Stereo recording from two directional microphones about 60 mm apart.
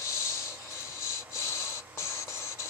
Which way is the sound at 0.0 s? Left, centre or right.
Left.